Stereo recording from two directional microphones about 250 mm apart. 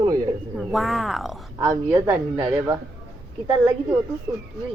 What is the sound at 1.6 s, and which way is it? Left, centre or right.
Speech, centre.